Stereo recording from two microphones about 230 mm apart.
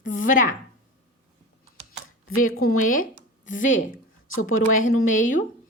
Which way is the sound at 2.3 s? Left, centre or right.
Left.